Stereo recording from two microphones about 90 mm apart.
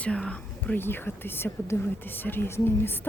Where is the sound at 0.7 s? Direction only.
25° left (ahead or behind).